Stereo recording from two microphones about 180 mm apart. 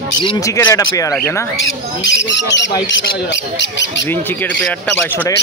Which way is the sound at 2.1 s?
85° left.